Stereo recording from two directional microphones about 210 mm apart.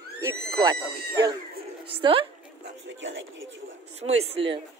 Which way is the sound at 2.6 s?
60° right (ahead or behind).